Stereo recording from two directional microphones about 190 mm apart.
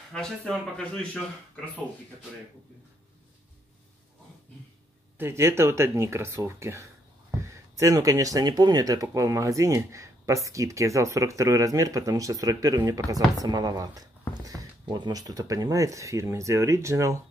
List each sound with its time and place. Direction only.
0.1 s speech: 5° left (ahead or behind)
5.1 s speech: 10° right (ahead or behind)